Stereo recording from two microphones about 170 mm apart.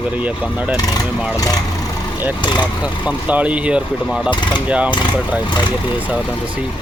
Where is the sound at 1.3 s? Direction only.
20° left (ahead or behind).